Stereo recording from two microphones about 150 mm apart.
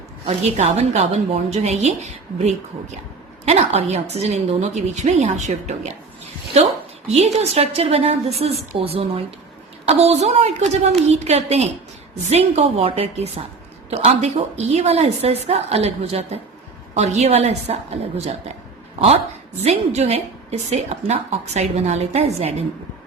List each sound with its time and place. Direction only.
0.3 s a woman's voice: 45° right (ahead or behind)
7.1 s a woman's voice: 45° right (ahead or behind)
18.9 s a woman's voice: 45° right (ahead or behind)